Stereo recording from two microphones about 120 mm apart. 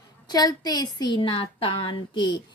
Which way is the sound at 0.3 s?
35° left (ahead or behind).